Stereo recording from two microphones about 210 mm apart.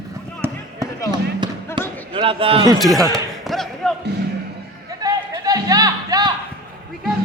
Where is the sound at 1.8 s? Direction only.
25° right (ahead or behind).